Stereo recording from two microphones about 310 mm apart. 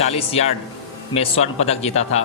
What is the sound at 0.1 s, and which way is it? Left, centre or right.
A man's voice, centre.